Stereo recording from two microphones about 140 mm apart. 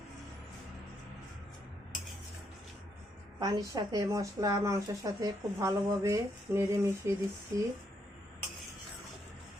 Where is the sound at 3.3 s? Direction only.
30° right (ahead or behind).